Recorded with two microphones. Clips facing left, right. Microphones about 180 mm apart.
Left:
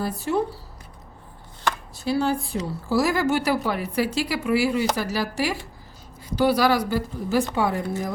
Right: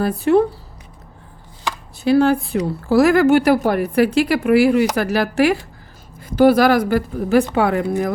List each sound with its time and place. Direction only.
0.0 s speech: 60° right (ahead or behind)
2.0 s speech: 60° right (ahead or behind)
6.1 s a woman's voice: 50° right (ahead or behind); by 8.1 s 70° right (ahead or behind)